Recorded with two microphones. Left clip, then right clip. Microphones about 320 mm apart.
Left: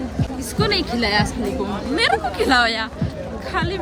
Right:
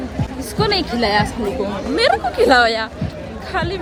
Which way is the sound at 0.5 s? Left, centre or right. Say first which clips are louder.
Right 2 dB; centre.